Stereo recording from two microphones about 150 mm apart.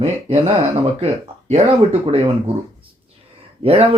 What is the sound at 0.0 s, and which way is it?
Speech, 45° right (ahead or behind).